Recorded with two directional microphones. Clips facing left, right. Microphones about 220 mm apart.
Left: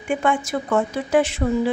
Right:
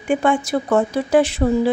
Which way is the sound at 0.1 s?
30° right (ahead or behind).